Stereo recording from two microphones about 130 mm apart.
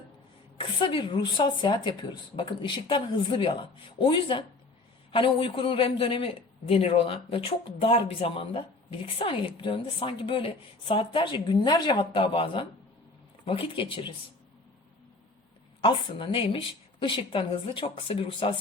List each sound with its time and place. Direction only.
0.6 s a man's voice: 40° left (ahead or behind)
15.8 s a man's voice: 40° left (ahead or behind)